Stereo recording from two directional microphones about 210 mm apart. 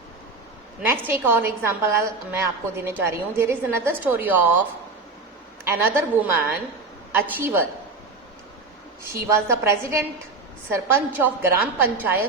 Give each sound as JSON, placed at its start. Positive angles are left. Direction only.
{"t": 0.8, "sound": "a woman's voice", "side_deg": -10}
{"t": 5.6, "sound": "a woman's voice", "side_deg": -10}
{"t": 9.1, "sound": "a woman's voice", "side_deg": -10}